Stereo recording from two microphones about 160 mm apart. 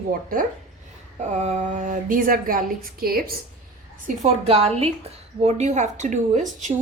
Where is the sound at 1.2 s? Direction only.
45° right (ahead or behind); by 3.3 s 70° right (ahead or behind).